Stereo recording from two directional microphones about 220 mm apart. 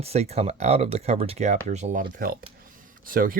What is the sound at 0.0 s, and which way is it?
Speech, 30° right (ahead or behind).